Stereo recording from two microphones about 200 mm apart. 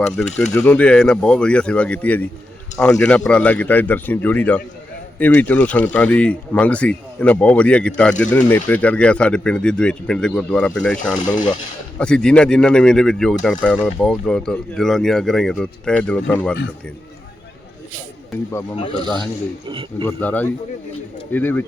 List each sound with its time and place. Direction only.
0.0 s speech: 5° left (ahead or behind)
19.0 s speech: 5° left (ahead or behind)
19.6 s a man's voice: 25° right (ahead or behind)
20.1 s speech: 10° left (ahead or behind)